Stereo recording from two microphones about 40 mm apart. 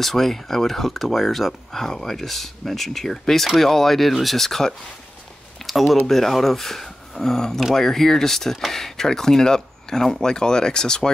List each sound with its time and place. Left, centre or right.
0.0 s speech: centre
5.7 s speech: centre